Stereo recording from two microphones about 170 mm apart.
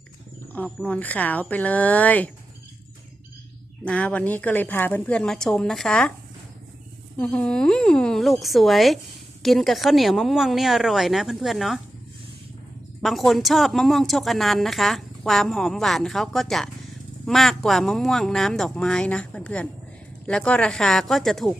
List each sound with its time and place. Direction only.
0.8 s a woman's voice: 10° left (ahead or behind)
3.8 s a woman's voice: 5° left (ahead or behind)
7.2 s a woman's voice: 5° left (ahead or behind)
13.0 s a woman's voice: centre (ahead or behind)